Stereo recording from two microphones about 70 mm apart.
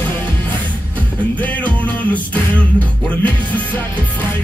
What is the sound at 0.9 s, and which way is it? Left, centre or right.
Music, left.